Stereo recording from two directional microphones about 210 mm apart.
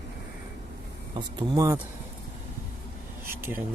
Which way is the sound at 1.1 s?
20° right (ahead or behind).